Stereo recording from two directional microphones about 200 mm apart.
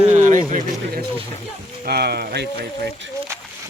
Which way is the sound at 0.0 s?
35° right (ahead or behind).